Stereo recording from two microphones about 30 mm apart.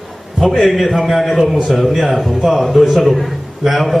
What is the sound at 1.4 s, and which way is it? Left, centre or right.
Speech, centre.